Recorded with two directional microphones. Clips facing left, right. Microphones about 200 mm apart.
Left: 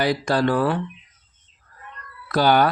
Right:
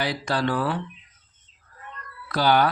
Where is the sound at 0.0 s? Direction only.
45° left (ahead or behind).